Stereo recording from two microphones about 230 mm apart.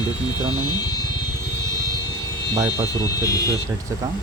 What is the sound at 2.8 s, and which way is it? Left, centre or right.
Speech, centre.